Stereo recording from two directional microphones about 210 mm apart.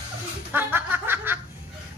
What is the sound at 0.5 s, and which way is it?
Snicker, 10° right (ahead or behind).